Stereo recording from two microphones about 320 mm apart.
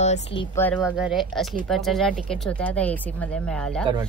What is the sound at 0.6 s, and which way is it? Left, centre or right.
Speech, centre.